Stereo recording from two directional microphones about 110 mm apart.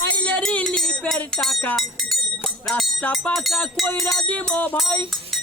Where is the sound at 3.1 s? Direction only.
5° left (ahead or behind).